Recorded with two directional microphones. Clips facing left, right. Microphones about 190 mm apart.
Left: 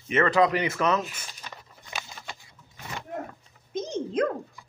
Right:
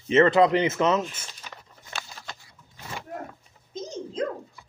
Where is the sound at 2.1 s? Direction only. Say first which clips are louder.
Even; 10° left (ahead or behind).